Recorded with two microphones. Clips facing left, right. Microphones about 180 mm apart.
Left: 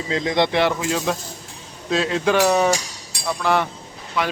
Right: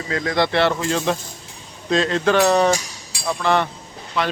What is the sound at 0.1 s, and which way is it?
Speech, 20° left (ahead or behind).